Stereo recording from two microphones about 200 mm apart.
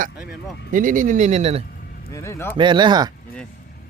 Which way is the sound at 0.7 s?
40° right (ahead or behind).